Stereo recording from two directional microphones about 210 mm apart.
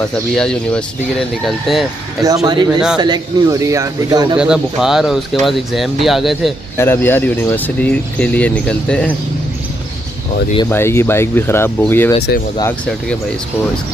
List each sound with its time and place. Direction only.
0.3 s speech: centre (ahead or behind)
2.2 s a man's voice: 20° right (ahead or behind)
4.4 s speech: 5° right (ahead or behind)
6.8 s speech: 10° left (ahead or behind)
10.7 s speech: 10° left (ahead or behind)